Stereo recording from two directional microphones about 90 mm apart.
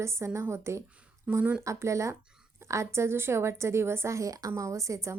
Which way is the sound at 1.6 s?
35° right (ahead or behind).